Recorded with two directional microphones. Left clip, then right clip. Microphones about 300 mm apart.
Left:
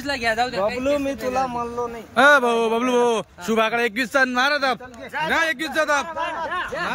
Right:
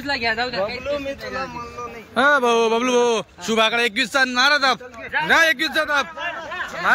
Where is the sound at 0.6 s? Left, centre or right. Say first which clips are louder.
Left 3 dB; left.